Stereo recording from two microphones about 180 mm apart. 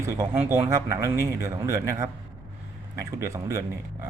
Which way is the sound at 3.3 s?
15° right (ahead or behind).